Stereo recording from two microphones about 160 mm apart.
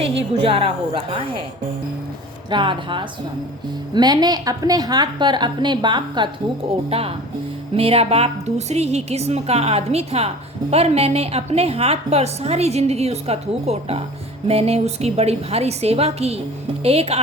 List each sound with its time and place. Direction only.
0.4 s a woman's voice: 35° right (ahead or behind)
2.5 s a woman's voice: 30° right (ahead or behind)